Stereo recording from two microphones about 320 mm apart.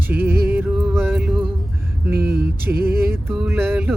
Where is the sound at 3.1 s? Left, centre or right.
Centre.